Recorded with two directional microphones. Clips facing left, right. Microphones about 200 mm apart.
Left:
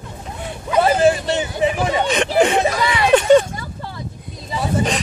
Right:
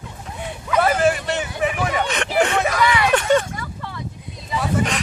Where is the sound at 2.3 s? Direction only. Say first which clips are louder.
Left 3 dB; 15° left (ahead or behind).